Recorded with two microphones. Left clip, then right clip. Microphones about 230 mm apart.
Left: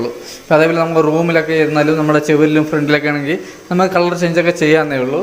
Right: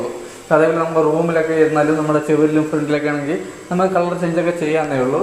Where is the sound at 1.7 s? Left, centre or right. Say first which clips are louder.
Left 3 dB; left.